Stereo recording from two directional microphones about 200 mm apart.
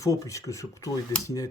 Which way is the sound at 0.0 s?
15° left (ahead or behind).